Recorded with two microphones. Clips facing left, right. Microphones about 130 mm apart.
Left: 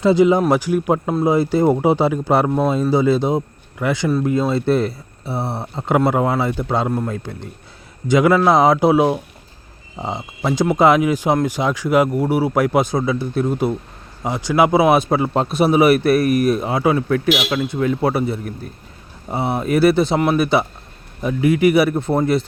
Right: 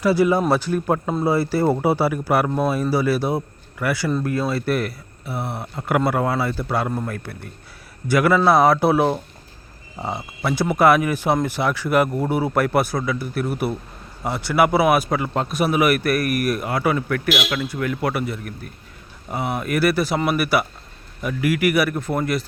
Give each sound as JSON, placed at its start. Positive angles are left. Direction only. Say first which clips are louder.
{"t": 0.0, "sound": "speech", "louder": "left 4 dB", "side_deg": 20}